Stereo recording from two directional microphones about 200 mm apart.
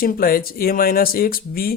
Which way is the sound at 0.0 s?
45° left (ahead or behind).